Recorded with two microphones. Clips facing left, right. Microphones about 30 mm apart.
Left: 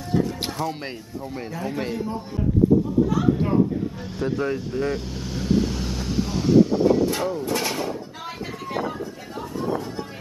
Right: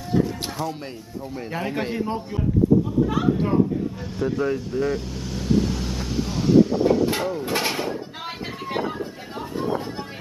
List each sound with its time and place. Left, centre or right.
0.1 s music: centre
1.5 s a man's voice: right
1.8 s a man's voice: centre
3.3 s speech: centre
4.2 s vehicle: centre
7.2 s speech: centre
7.4 s a sound: right
8.6 s vehicle: right